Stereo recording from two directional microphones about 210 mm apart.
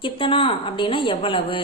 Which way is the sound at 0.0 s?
25° left (ahead or behind).